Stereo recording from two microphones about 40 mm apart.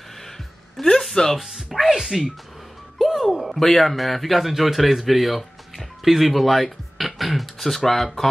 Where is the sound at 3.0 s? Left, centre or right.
Centre.